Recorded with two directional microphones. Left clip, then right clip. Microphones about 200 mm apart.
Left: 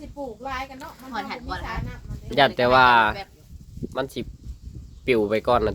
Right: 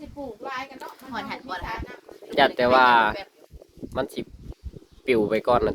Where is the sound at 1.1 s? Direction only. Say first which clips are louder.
Left 1 dB; 5° right (ahead or behind).